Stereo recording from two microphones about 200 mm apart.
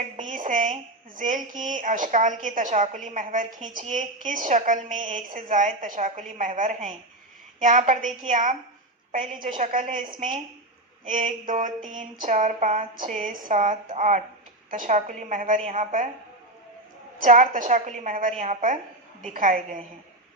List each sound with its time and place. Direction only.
0.2 s a woman's voice: 40° right (ahead or behind)
9.6 s a woman's voice: 40° right (ahead or behind)
17.2 s a woman's voice: 40° right (ahead or behind)